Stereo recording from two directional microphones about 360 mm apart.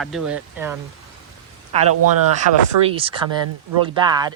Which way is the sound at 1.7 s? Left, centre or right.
Centre.